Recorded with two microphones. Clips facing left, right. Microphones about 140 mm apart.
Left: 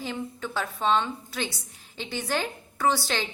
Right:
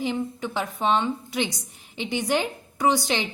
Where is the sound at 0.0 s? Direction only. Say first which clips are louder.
Right 6 dB; 15° right (ahead or behind).